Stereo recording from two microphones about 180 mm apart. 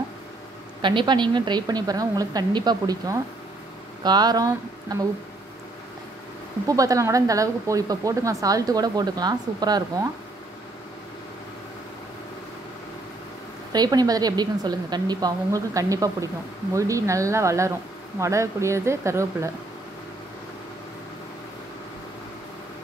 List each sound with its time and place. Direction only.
0.8 s speech: 25° right (ahead or behind)
6.7 s speech: 20° right (ahead or behind)
13.7 s speech: 20° right (ahead or behind)